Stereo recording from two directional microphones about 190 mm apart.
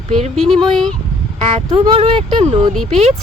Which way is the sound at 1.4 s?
35° right (ahead or behind).